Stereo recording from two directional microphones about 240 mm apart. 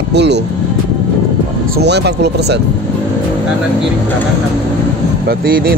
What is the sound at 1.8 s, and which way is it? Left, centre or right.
Speech, right.